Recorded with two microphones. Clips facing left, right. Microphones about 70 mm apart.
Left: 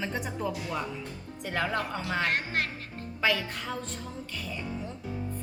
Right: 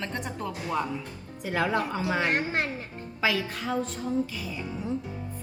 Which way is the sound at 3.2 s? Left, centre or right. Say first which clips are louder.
Right 1 dB; centre.